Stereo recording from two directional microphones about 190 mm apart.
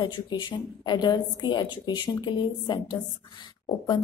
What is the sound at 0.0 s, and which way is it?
A woman's voice, 25° left (ahead or behind).